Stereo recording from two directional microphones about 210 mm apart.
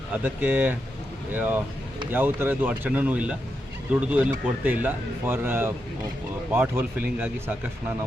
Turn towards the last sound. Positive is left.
turn(degrees=-10)  # may be behind; listen again after turning